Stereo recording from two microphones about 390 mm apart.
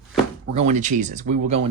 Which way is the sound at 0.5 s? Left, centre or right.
Centre.